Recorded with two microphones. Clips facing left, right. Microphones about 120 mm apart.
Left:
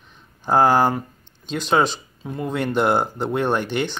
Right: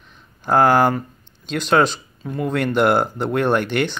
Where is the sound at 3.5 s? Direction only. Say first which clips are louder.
Right 3 dB; 60° right (ahead or behind).